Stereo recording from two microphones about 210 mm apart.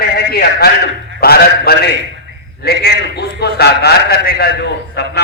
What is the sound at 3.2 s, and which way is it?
A man's voice, 50° left (ahead or behind).